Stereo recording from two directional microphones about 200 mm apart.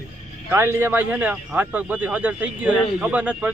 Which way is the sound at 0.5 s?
10° right (ahead or behind).